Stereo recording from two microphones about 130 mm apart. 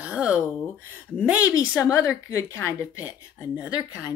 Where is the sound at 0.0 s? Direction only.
10° right (ahead or behind).